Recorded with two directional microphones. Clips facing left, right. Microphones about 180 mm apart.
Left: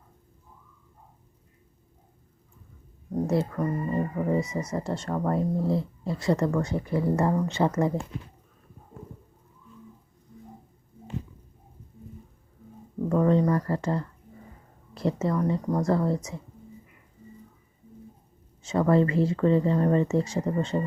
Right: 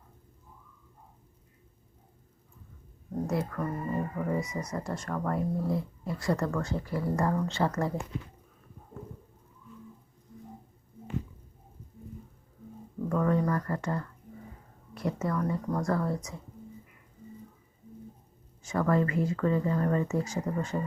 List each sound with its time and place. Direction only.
3.2 s speech: 25° left (ahead or behind)
13.1 s a sound: 25° left (ahead or behind)
14.9 s speech: 25° left (ahead or behind)
18.6 s speech: 25° left (ahead or behind)